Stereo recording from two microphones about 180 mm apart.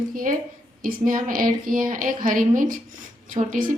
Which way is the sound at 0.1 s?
50° right (ahead or behind).